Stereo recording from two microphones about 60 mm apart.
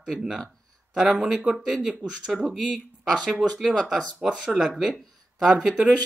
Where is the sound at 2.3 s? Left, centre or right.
Centre.